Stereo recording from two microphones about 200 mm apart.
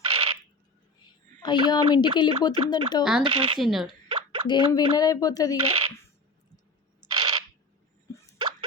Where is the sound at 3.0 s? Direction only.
5° right (ahead or behind).